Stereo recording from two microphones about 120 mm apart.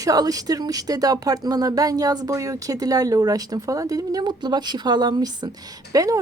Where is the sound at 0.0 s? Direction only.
30° right (ahead or behind).